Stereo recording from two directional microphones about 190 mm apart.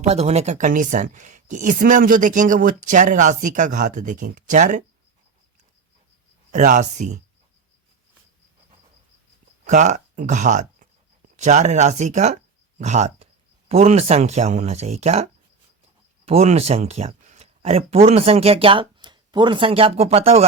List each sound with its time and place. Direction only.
0.0 s speech: 35° right (ahead or behind)
6.5 s speech: 40° right (ahead or behind)
9.6 s speech: 40° right (ahead or behind)